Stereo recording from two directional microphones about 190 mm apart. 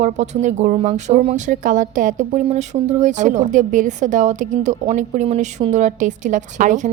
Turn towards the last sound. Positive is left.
turn(degrees=-40)  # may be behind; listen again after turning